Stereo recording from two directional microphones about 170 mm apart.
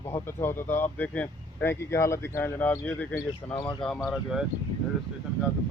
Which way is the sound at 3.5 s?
30° left (ahead or behind).